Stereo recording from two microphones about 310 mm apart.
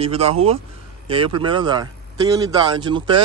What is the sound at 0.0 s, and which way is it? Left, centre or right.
A man's voice, centre.